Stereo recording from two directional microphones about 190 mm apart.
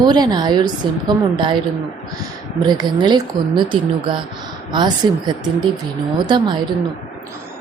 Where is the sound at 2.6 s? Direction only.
20° right (ahead or behind).